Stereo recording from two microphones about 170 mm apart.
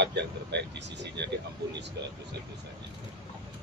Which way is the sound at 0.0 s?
90° right.